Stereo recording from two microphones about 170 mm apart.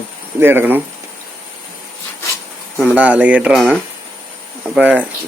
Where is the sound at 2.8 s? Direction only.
10° right (ahead or behind).